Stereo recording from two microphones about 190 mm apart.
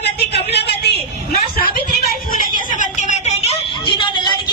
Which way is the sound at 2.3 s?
45° left (ahead or behind).